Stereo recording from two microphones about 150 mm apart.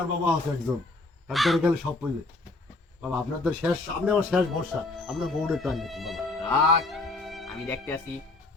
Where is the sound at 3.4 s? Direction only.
5° right (ahead or behind).